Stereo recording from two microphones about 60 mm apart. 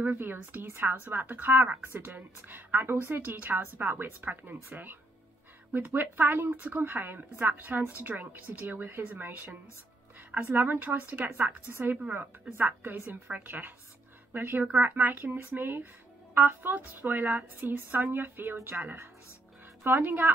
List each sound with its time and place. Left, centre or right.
0.0 s a woman's voice: right
5.9 s a woman's voice: right